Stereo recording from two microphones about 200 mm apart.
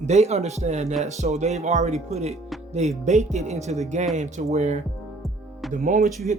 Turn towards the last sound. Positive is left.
turn(degrees=-40)  # may be behind; listen again after turning